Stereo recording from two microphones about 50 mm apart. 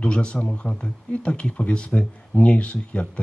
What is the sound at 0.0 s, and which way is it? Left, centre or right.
Speech, left.